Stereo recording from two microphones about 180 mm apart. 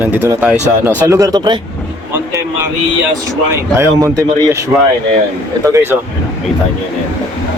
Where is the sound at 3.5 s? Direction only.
15° right (ahead or behind).